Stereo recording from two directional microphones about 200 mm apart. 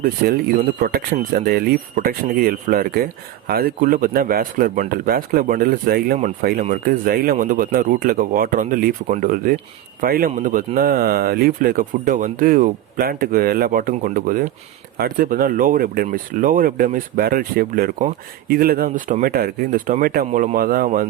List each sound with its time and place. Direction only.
0.0 s speech: 50° right (ahead or behind)